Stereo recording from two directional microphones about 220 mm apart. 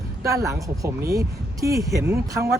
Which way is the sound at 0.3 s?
15° right (ahead or behind).